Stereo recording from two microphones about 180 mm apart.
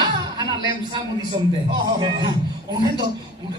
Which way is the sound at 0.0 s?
25° right (ahead or behind).